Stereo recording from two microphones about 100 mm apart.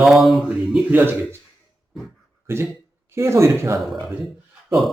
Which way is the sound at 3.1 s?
25° right (ahead or behind).